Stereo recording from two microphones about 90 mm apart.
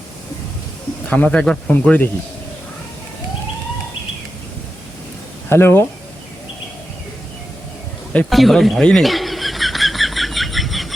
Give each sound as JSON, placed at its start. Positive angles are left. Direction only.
{"t": 1.0, "sound": "speech", "side_deg": 15}
{"t": 5.5, "sound": "speech", "side_deg": 25}
{"t": 8.3, "sound": "bird", "side_deg": 0}